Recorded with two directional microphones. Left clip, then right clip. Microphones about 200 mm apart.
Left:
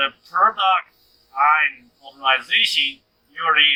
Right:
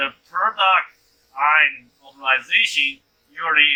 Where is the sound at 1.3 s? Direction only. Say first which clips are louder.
Even; 55° left (ahead or behind).